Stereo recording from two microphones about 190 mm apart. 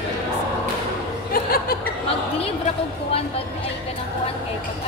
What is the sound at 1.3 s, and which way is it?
Chuckle, 50° left (ahead or behind).